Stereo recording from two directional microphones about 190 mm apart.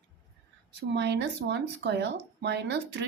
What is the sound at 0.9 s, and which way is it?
Speech, 65° right (ahead or behind).